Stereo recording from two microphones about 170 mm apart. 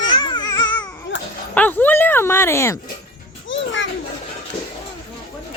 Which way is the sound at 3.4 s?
90° left.